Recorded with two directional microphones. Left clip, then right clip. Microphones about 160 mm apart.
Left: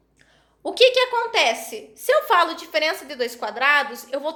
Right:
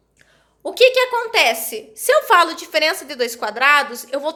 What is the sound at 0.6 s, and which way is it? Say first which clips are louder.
A woman's voice: right 3 dB; 5° right (ahead or behind).